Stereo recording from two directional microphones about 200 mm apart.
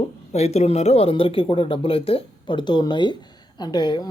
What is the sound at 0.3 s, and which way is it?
Speech, 35° left (ahead or behind).